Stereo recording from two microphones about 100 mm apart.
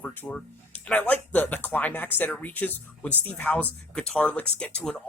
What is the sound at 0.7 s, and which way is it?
Speech, 15° left (ahead or behind).